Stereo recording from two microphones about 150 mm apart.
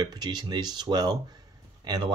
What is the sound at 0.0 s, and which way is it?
Speech, 25° right (ahead or behind).